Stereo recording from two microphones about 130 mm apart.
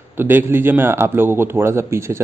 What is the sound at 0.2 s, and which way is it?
A man's voice, 15° right (ahead or behind).